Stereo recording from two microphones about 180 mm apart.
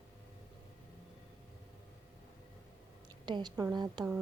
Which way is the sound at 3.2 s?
25° right (ahead or behind).